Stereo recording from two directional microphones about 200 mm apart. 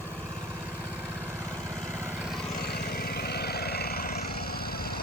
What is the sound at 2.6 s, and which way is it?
Vehicle, 55° left (ahead or behind).